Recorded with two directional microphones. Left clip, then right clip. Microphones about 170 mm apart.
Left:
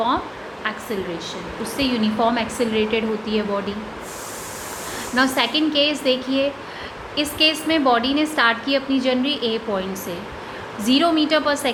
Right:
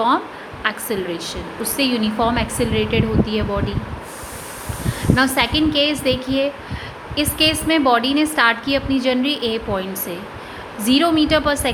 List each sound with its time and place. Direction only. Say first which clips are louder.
0.6 s a woman's voice: right 4 dB; 30° right (ahead or behind); by 3.8 s 15° right (ahead or behind)
5.1 s a woman's voice: right 2 dB; 15° right (ahead or behind)